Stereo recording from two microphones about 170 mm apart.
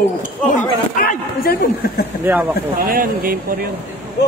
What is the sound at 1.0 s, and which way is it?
Speech, 60° left (ahead or behind).